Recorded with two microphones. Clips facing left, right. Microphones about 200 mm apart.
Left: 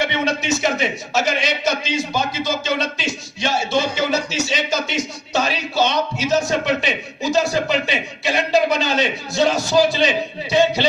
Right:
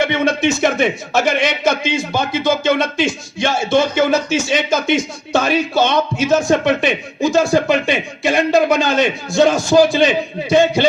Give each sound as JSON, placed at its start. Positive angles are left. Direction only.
{"t": 0.0, "sound": "speech", "side_deg": -50}